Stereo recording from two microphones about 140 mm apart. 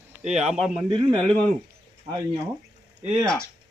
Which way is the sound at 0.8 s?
35° right (ahead or behind).